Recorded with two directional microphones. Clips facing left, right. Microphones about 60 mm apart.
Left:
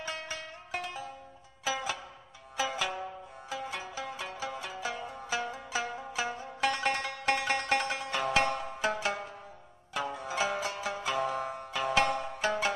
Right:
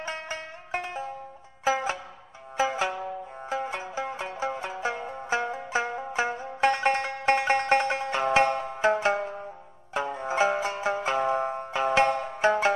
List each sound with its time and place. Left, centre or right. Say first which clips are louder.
0.0 s music: right 4 dB; right
3.4 s zither: right 6 dB; right